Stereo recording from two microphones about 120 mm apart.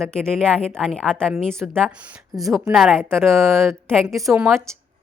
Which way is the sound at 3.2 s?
5° left (ahead or behind).